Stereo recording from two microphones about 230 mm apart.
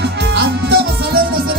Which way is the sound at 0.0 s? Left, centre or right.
Right.